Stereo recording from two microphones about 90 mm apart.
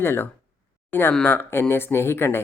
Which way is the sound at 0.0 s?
25° left (ahead or behind).